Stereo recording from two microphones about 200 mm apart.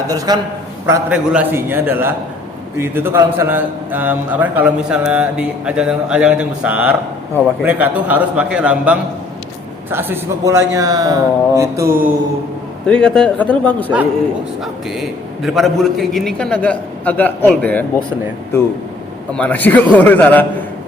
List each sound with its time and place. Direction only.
0.1 s a man's voice: 20° right (ahead or behind)
0.9 s a man's voice: 5° right (ahead or behind)
12.8 s a man's voice: 5° left (ahead or behind)
19.3 s a man's voice: 5° left (ahead or behind)